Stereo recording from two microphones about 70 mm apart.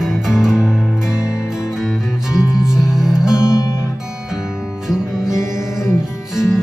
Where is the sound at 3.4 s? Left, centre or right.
Left.